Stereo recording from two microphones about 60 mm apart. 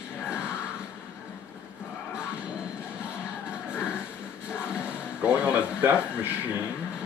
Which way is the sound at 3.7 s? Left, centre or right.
Centre.